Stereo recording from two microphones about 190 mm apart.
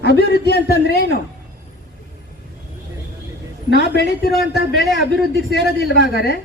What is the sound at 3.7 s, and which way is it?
Speech, 65° left (ahead or behind).